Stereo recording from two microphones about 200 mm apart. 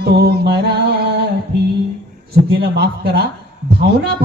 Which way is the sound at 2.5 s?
55° right (ahead or behind).